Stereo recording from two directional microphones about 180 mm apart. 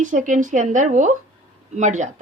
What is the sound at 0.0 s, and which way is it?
A woman's voice, 45° right (ahead or behind).